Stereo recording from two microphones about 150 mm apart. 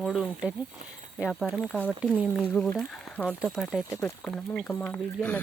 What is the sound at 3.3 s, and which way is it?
Speech, 5° right (ahead or behind).